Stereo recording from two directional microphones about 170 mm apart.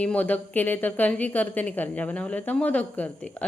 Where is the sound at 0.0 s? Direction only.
10° left (ahead or behind).